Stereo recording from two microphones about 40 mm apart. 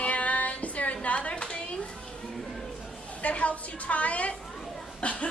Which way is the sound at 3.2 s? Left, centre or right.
Left.